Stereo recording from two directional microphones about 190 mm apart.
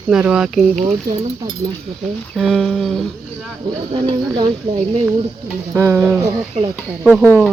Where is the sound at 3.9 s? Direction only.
30° right (ahead or behind).